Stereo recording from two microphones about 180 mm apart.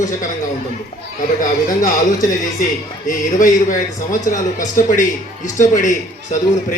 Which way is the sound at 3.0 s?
45° left (ahead or behind).